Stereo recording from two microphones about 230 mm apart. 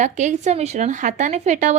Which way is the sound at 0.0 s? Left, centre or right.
Right.